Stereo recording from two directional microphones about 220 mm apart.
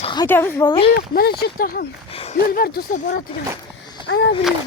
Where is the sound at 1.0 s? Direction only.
45° left (ahead or behind).